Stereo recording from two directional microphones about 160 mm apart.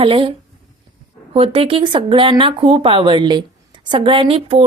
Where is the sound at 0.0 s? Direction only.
35° right (ahead or behind).